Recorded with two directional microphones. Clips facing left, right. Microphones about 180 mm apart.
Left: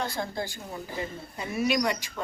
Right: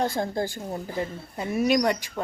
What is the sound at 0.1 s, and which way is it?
Speech, 50° right (ahead or behind).